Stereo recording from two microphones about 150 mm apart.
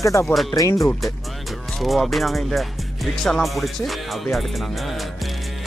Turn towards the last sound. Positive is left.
turn(degrees=0)  # may be behind; listen again after turning